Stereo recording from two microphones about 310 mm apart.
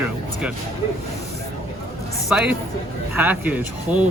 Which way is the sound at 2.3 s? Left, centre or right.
Centre.